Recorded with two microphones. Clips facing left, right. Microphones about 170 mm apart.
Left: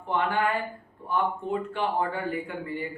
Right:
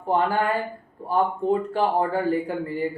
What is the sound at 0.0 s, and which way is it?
A man's voice, 35° right (ahead or behind).